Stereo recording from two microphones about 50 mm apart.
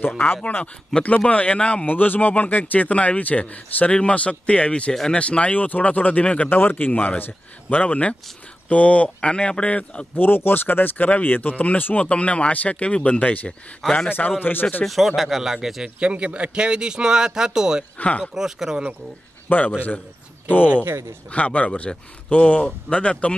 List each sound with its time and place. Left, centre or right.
0.9 s speech: centre
1.3 s speech: left
1.9 s speech: left
6.5 s speech: left
10.1 s speech: left
14.0 s speech: left
14.9 s speech: centre
16.0 s a man's voice: right
17.9 s speech: left
18.3 s a man's voice: centre
19.5 s speech: left
20.8 s speech: right
21.3 s speech: left